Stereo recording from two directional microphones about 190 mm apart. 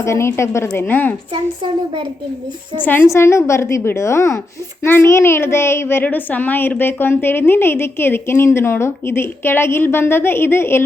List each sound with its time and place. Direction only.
0.0 s a woman's voice: 15° left (ahead or behind)
1.3 s speech: 25° right (ahead or behind)
2.8 s a woman's voice: 10° left (ahead or behind)